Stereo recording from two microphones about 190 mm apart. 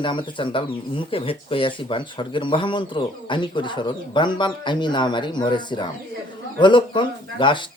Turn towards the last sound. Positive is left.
turn(degrees=25)  # may be behind; listen again after turning